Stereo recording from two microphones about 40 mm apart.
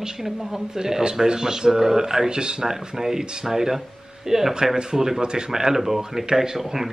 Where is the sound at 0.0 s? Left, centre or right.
Centre.